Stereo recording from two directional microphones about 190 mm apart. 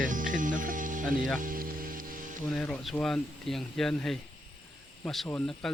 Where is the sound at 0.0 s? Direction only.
45° right (ahead or behind).